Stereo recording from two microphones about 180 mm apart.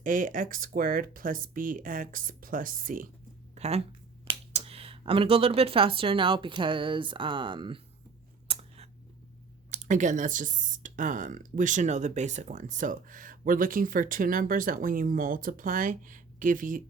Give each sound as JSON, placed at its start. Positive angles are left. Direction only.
{"t": 0.0, "sound": "speech", "side_deg": -50}
{"t": 3.5, "sound": "speech", "side_deg": -35}
{"t": 8.4, "sound": "a sound", "side_deg": -35}
{"t": 9.6, "sound": "speech", "side_deg": -40}